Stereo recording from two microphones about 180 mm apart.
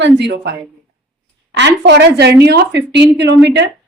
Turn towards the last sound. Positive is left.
turn(degrees=-70)  # may be behind; listen again after turning